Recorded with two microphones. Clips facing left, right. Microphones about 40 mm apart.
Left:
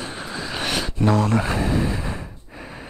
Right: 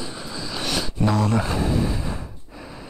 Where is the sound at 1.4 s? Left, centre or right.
Left.